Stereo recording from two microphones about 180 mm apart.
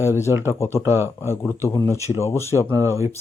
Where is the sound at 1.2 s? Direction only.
15° left (ahead or behind).